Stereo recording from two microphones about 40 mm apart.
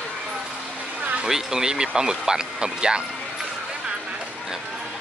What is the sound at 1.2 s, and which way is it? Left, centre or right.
Speech, centre.